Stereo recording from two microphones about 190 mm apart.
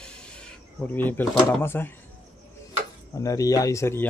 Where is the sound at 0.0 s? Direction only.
5° left (ahead or behind).